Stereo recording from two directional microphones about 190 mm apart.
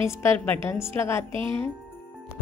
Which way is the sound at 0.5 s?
15° left (ahead or behind).